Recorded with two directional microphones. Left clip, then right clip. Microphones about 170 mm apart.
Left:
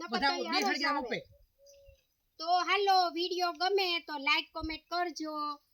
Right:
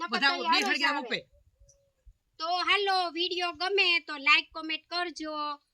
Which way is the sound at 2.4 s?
10° right (ahead or behind).